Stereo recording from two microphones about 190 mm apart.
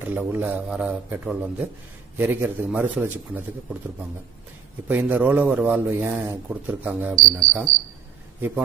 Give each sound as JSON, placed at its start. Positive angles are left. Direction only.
{"t": 0.0, "sound": "a man's voice", "side_deg": -10}
{"t": 4.8, "sound": "a man's voice", "side_deg": -10}
{"t": 7.2, "sound": "cricket", "side_deg": -20}
{"t": 8.4, "sound": "a man's voice", "side_deg": -10}